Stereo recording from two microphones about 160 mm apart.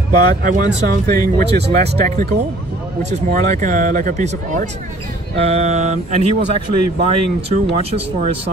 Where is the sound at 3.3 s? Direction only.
55° right (ahead or behind).